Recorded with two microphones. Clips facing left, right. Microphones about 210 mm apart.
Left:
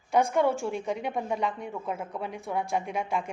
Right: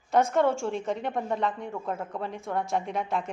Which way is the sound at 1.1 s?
10° left (ahead or behind).